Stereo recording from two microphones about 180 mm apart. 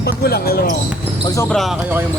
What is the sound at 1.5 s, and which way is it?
Speech, centre (ahead or behind).